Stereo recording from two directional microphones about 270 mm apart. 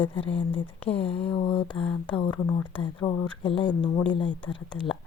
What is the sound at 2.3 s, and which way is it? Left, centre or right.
Speech, centre.